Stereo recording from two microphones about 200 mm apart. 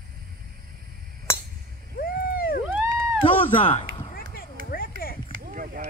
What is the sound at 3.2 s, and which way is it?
Speech, 35° left (ahead or behind).